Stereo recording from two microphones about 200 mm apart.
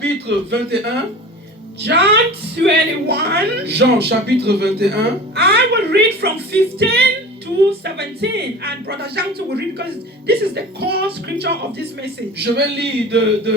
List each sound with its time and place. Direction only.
0.0 s speech: 55° right (ahead or behind)
10.2 s speech: 55° right (ahead or behind)